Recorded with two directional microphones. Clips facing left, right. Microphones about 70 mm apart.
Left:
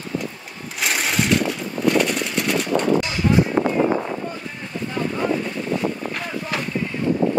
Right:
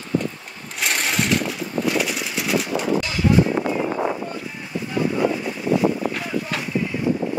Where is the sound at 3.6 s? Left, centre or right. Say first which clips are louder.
Left 3 dB; left.